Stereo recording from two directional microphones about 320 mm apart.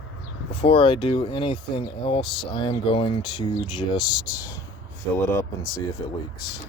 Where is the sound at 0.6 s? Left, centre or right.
Centre.